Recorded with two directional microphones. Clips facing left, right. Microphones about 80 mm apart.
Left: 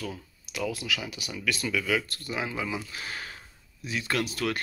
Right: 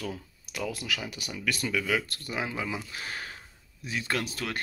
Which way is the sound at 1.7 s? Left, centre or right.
Right.